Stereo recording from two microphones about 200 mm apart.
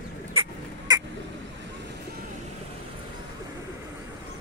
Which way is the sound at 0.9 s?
20° right (ahead or behind).